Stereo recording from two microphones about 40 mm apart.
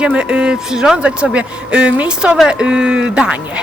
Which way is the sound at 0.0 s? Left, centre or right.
Right.